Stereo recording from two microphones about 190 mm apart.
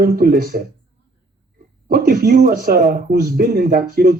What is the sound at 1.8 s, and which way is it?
Speech, 50° right (ahead or behind).